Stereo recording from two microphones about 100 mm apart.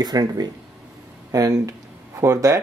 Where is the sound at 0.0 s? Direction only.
40° right (ahead or behind).